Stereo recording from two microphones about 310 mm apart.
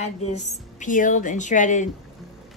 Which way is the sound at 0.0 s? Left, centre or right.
Left.